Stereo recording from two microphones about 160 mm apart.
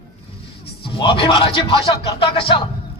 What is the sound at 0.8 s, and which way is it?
Speech, 35° left (ahead or behind).